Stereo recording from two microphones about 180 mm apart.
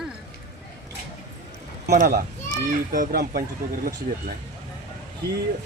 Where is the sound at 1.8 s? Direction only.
60° right (ahead or behind).